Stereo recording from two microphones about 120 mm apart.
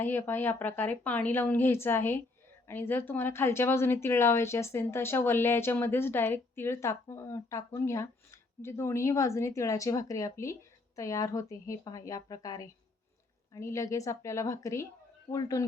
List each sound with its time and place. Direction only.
0.0 s a woman's voice: 20° left (ahead or behind)